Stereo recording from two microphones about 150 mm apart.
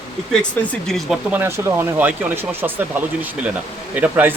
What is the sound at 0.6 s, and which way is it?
Speech, 5° left (ahead or behind).